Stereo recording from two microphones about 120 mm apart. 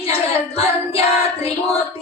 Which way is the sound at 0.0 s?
55° left (ahead or behind).